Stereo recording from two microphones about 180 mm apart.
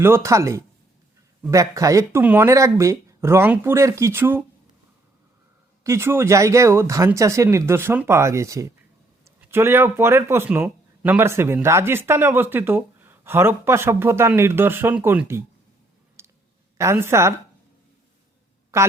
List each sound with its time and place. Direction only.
0.0 s speech: 15° right (ahead or behind)
5.8 s speech: 15° right (ahead or behind)
9.2 s a sound: 15° right (ahead or behind)
10.0 s speech: 15° right (ahead or behind)
16.2 s clicking: 15° right (ahead or behind)
16.7 s speech: 15° right (ahead or behind)
18.7 s speech: 15° right (ahead or behind)